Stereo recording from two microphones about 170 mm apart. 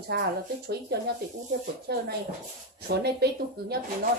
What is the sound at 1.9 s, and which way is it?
A woman's voice, 75° right (ahead or behind).